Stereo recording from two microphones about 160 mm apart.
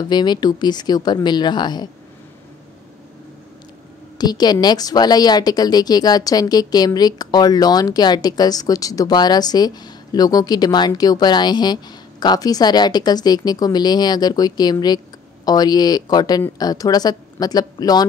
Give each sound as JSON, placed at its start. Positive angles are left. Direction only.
{"t": 0.1, "sound": "a woman's voice", "side_deg": 25}
{"t": 4.2, "sound": "a woman's voice", "side_deg": 25}